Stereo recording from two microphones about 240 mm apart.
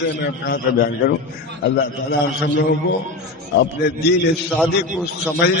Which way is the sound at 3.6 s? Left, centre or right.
Left.